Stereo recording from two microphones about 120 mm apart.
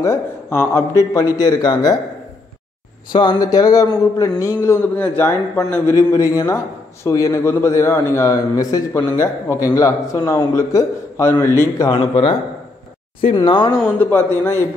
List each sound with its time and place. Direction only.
0.0 s a man's voice: 20° left (ahead or behind)
3.1 s a man's voice: 40° left (ahead or behind); by 11.9 s 20° left (ahead or behind)
11.9 s a man's voice: 45° left (ahead or behind)
13.9 s a man's voice: 20° left (ahead or behind)